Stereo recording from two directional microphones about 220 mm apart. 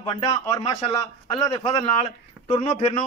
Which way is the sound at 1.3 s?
20° left (ahead or behind).